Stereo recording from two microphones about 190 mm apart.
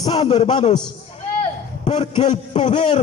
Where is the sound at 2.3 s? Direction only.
35° left (ahead or behind).